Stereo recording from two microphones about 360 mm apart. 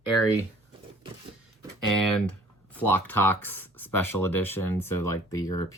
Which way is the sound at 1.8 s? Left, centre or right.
Left.